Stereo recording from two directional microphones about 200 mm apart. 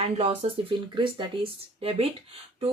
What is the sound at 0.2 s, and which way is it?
Speech, 30° right (ahead or behind).